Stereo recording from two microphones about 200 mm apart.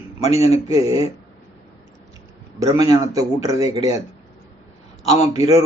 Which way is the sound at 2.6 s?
20° right (ahead or behind).